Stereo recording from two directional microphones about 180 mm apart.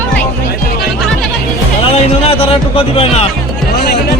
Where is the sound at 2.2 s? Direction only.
30° left (ahead or behind).